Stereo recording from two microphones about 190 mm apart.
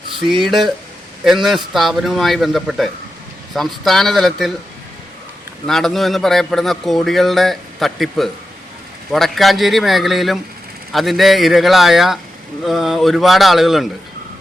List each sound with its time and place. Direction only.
0.4 s a man's voice: centre (ahead or behind)
5.6 s a man's voice: centre (ahead or behind)